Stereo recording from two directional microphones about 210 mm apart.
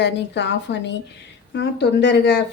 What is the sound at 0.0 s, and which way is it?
A woman's voice, 55° left (ahead or behind).